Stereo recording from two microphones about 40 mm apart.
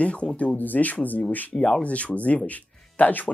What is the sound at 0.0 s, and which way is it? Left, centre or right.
Speech, left.